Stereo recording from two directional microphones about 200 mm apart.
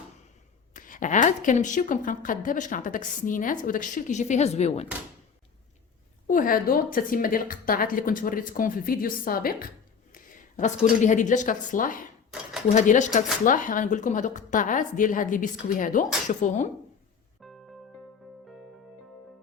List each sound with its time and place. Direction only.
0.7 s speech: 40° left (ahead or behind)
6.2 s a woman's voice: 45° left (ahead or behind)
12.3 s dishes: centre (ahead or behind)
12.7 s speech: 40° left (ahead or behind)
17.4 s music: centre (ahead or behind)